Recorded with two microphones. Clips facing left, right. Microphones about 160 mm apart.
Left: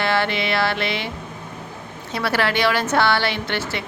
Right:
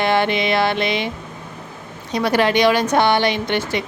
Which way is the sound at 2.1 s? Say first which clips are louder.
Right 5 dB; 15° right (ahead or behind).